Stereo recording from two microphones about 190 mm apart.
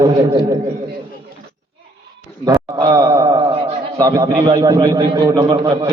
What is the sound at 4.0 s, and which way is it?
A man's voice, 20° right (ahead or behind).